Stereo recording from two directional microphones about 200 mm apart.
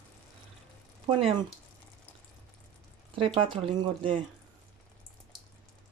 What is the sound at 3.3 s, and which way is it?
Speech, 25° right (ahead or behind).